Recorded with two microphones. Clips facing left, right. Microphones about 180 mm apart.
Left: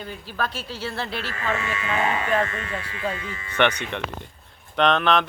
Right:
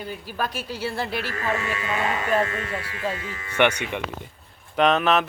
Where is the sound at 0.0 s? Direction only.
10° right (ahead or behind).